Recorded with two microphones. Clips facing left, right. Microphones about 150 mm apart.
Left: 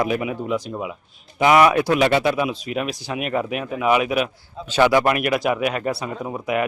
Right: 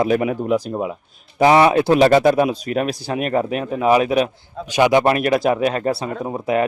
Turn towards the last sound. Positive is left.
turn(degrees=-30)  # may be behind; listen again after turning